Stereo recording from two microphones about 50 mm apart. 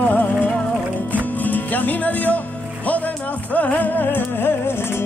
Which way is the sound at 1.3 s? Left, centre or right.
Left.